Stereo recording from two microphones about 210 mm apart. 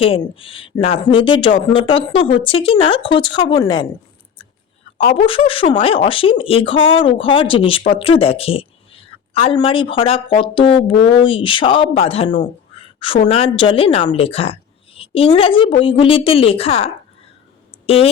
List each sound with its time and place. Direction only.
0.0 s a woman's voice: 25° left (ahead or behind)
4.9 s a woman's voice: 25° left (ahead or behind)